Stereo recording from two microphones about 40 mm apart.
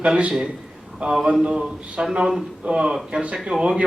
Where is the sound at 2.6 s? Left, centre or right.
Right.